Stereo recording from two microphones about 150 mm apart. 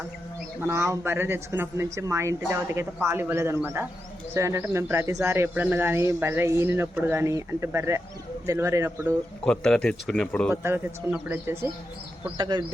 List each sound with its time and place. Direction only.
0.7 s a man's voice: 20° right (ahead or behind)
9.4 s speech: 5° left (ahead or behind)
10.5 s speech: 15° right (ahead or behind)
12.4 s a man's voice: 30° right (ahead or behind)